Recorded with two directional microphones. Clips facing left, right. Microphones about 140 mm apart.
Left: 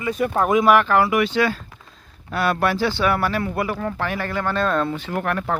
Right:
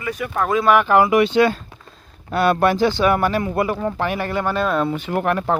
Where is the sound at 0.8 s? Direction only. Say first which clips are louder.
Right 4 dB; 15° right (ahead or behind).